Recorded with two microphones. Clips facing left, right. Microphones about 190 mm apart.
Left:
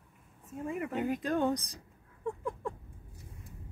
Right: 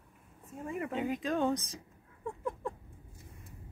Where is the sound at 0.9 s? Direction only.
5° left (ahead or behind).